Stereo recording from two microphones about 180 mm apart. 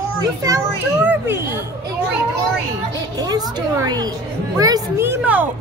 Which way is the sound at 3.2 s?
20° right (ahead or behind).